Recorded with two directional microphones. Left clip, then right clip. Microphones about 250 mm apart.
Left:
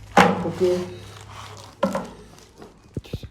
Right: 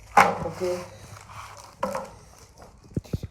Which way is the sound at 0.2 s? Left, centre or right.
Left.